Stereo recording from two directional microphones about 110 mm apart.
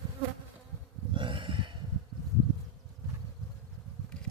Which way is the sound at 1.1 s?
50° right (ahead or behind).